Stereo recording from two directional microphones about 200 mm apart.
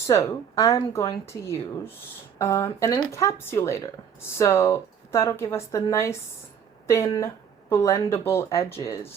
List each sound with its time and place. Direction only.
0.1 s speech: 15° left (ahead or behind)
2.4 s speech: 15° left (ahead or behind)